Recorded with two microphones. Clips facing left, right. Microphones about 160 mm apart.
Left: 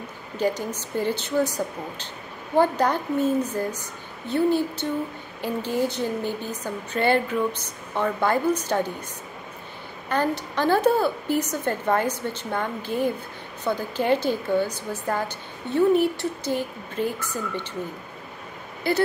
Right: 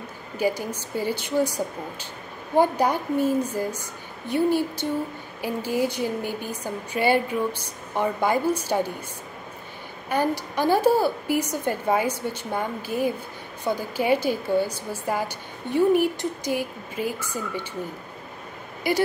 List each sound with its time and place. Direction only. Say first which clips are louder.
0.4 s a woman's voice: even; 10° right (ahead or behind)
2.5 s a woman's voice: even; 10° right (ahead or behind)
4.3 s a woman's voice: even; 10° right (ahead or behind)
10.0 s a woman's voice: even; 10° right (ahead or behind)